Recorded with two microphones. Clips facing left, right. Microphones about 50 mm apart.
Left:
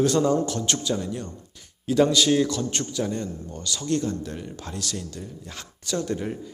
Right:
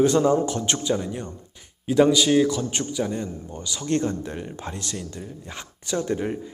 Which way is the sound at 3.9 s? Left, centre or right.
Right.